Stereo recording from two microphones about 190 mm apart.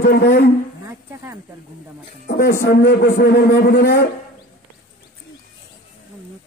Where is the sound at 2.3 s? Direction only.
55° left (ahead or behind).